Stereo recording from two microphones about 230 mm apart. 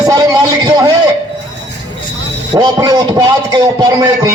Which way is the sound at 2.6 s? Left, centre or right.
Centre.